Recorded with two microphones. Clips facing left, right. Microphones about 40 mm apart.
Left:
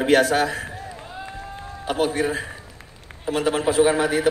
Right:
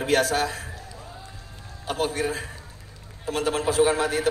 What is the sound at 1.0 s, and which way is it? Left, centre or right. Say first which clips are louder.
Run: left 7 dB; left.